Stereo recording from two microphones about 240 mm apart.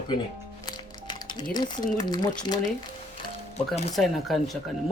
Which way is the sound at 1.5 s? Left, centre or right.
Centre.